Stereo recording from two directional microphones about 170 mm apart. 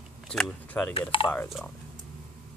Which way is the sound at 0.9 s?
30° left (ahead or behind).